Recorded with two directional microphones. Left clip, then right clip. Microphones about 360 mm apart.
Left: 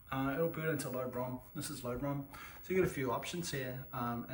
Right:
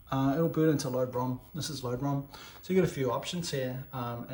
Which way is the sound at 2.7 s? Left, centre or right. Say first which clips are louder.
Right 5 dB; centre.